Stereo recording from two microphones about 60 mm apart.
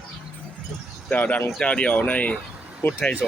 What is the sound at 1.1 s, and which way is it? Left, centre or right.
Speech, left.